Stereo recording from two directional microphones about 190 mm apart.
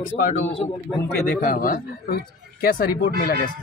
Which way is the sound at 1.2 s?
50° left (ahead or behind).